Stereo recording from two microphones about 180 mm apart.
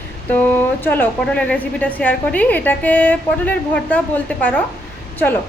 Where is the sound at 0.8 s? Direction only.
10° left (ahead or behind).